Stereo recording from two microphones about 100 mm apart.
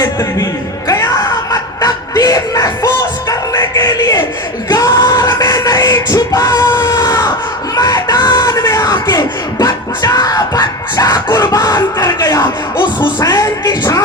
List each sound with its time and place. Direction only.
0.0 s a man's voice: 25° left (ahead or behind)
0.9 s music: 35° left (ahead or behind)
5.6 s a sound: 40° left (ahead or behind)
13.1 s music: 45° left (ahead or behind)